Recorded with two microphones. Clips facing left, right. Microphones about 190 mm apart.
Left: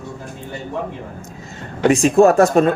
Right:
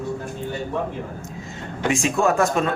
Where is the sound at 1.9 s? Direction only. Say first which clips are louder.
Left 8 dB; 40° left (ahead or behind).